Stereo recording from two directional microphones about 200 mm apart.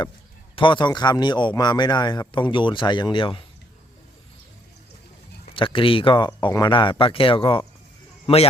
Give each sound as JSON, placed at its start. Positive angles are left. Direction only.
{"t": 0.5, "sound": "a man's voice", "side_deg": 25}
{"t": 5.5, "sound": "a man's voice", "side_deg": 25}